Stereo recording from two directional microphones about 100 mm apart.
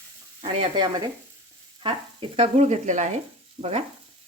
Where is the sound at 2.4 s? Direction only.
90° right.